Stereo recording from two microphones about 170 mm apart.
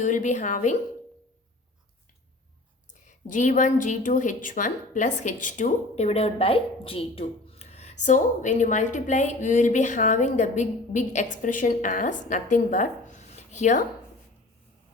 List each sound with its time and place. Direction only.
0.0 s a woman's voice: 50° left (ahead or behind)
3.0 s a woman's voice: 45° left (ahead or behind)